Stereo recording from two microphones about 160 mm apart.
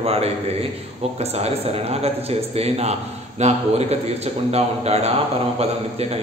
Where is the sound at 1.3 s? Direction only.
40° right (ahead or behind).